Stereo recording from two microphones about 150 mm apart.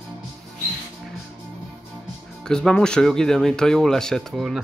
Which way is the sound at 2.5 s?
5° left (ahead or behind).